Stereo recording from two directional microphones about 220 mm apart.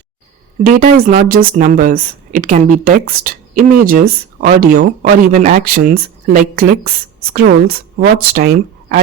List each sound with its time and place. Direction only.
0.6 s speech: 40° right (ahead or behind)